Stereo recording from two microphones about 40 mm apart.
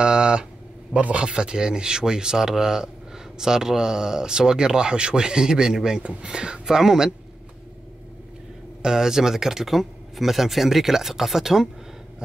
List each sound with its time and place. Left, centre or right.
0.0 s a sound: right
0.9 s speech: right; by 7.1 s centre
8.8 s speech: centre